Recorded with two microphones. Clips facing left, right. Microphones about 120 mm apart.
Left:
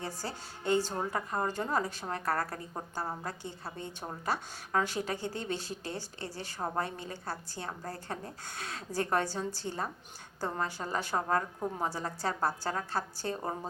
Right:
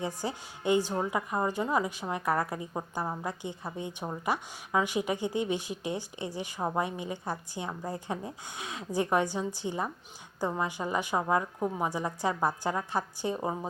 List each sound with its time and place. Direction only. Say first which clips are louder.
0.0 s a woman's voice: right 5 dB; 15° right (ahead or behind)